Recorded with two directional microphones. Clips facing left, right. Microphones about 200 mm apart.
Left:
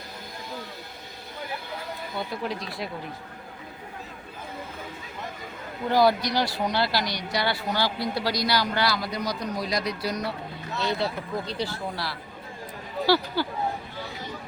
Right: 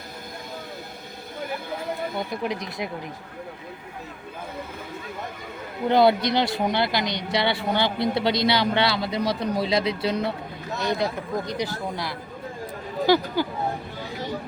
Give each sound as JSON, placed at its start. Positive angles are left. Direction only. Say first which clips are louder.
{"t": 2.1, "sound": "speech", "louder": "right 3 dB", "side_deg": -15}
{"t": 5.9, "sound": "speech", "louder": "right 3 dB", "side_deg": -25}